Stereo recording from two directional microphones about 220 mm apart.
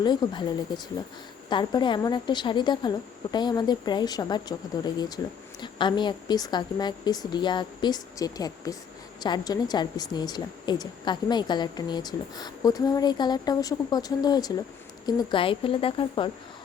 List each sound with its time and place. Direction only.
0.0 s a woman's voice: 20° left (ahead or behind)